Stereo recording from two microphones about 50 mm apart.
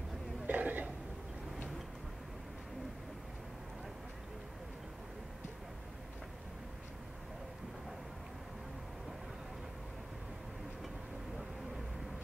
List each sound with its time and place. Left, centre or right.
0.5 s cough: right